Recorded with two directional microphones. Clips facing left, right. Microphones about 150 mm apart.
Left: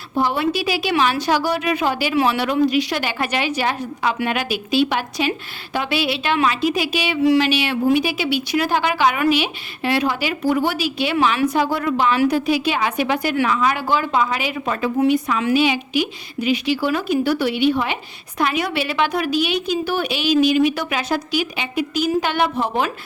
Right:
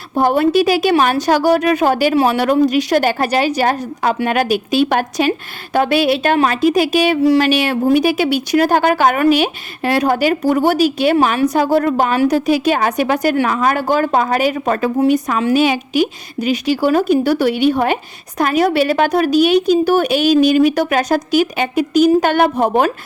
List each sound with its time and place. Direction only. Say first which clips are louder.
0.2 s a woman's voice: right 7 dB; 50° right (ahead or behind)